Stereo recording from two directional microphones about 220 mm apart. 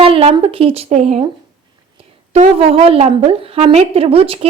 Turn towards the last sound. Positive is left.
turn(degrees=-25)  # may be behind; listen again after turning